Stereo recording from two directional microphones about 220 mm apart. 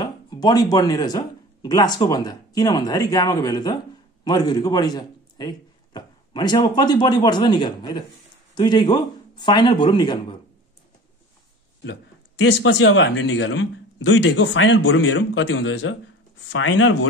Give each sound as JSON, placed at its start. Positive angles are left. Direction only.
{"t": 0.0, "sound": "a man's voice", "side_deg": 15}
{"t": 11.8, "sound": "a man's voice", "side_deg": 55}